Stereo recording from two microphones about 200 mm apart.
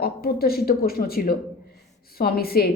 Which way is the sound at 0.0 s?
50° left (ahead or behind).